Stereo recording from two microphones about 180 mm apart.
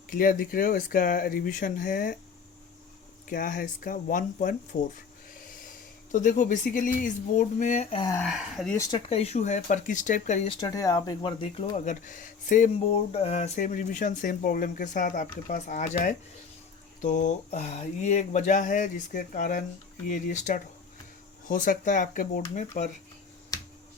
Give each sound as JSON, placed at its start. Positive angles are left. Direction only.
{"t": 0.1, "sound": "speech", "side_deg": 50}
{"t": 3.2, "sound": "speech", "side_deg": 50}
{"t": 6.1, "sound": "speech", "side_deg": 45}
{"t": 8.2, "sound": "speech", "side_deg": 0}
{"t": 8.7, "sound": "speech", "side_deg": 20}
{"t": 9.0, "sound": "speech", "side_deg": 35}
{"t": 10.5, "sound": "speech", "side_deg": 20}
{"t": 11.9, "sound": "speech", "side_deg": 45}